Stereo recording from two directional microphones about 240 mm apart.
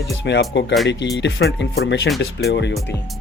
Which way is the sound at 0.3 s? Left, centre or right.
Left.